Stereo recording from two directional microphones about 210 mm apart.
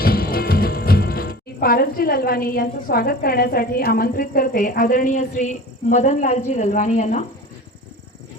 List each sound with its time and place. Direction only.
0.0 s speech: 45° left (ahead or behind)